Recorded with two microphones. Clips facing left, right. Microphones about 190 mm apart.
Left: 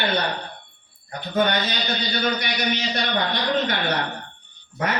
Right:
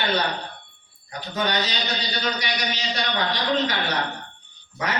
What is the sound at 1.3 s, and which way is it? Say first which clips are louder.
A man's voice: left 4 dB; 55° left (ahead or behind).